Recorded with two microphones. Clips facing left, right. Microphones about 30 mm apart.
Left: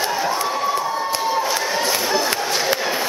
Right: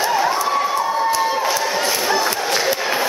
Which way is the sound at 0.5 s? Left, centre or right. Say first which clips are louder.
Right 3 dB; centre.